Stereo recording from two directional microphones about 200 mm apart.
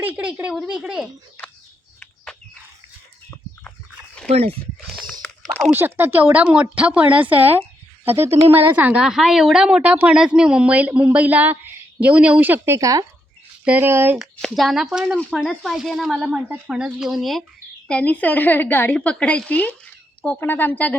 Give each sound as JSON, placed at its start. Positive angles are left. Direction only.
{"t": 0.0, "sound": "speech", "side_deg": -5}
{"t": 4.3, "sound": "speech", "side_deg": -30}
{"t": 5.4, "sound": "a sound", "side_deg": 5}
{"t": 5.7, "sound": "speech", "side_deg": -10}
{"t": 14.4, "sound": "a woman's voice", "side_deg": 0}